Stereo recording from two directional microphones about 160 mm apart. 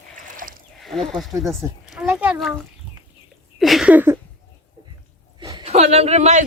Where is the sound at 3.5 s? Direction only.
Centre (ahead or behind).